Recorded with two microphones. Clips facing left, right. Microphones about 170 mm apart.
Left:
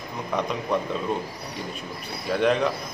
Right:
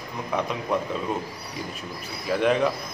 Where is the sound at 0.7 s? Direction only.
5° right (ahead or behind).